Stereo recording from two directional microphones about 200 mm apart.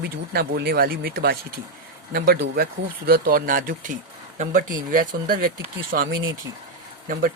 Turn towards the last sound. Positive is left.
turn(degrees=-45)  # may be behind; listen again after turning